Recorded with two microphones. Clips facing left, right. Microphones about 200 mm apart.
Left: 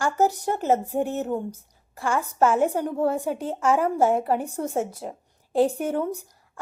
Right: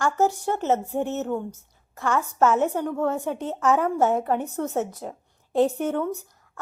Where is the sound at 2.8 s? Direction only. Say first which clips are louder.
Left 1 dB; 35° left (ahead or behind).